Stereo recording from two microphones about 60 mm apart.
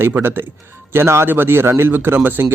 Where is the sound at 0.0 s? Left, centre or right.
Right.